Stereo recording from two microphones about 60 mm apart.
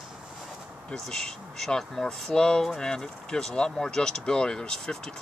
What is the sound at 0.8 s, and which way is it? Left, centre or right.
Speech, centre.